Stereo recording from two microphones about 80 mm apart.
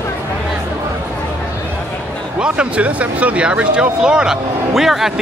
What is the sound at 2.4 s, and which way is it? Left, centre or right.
Speech, centre.